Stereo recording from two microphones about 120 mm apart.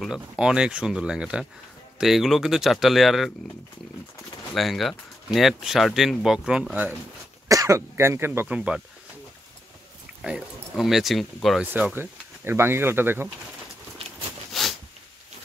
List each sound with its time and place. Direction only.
0.0 s speech: 5° right (ahead or behind)
4.6 s speech: centre (ahead or behind)
7.4 s speech: 25° right (ahead or behind)
8.5 s speech: 10° right (ahead or behind)
10.2 s speech: 5° right (ahead or behind)
11.6 s speech: 15° right (ahead or behind)
14.5 s zipper: centre (ahead or behind)